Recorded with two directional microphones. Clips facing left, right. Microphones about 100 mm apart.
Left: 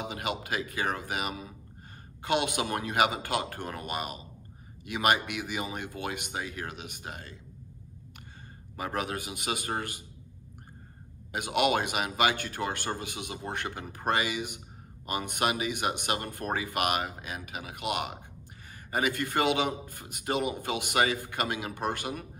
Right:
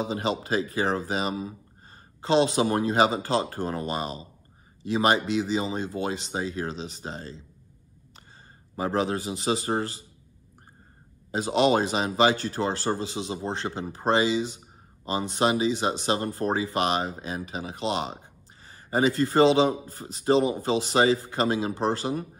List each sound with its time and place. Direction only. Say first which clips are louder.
0.0 s speech: right 6 dB; 30° right (ahead or behind)
8.7 s speech: right 7 dB; 30° right (ahead or behind)
11.3 s speech: right 5 dB; 30° right (ahead or behind)